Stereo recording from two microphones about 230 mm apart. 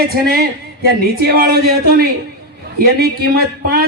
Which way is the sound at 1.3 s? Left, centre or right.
Right.